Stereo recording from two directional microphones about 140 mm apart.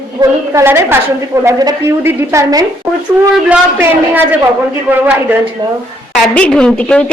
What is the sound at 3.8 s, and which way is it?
Speech, 10° right (ahead or behind).